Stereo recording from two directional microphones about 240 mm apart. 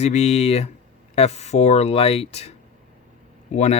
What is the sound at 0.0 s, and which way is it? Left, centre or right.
Speech, left.